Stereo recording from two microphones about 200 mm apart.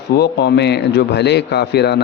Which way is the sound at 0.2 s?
55° left (ahead or behind).